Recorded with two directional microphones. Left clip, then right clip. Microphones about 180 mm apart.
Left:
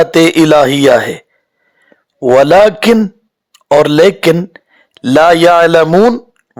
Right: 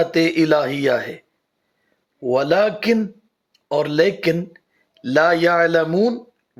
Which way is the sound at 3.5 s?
40° left (ahead or behind).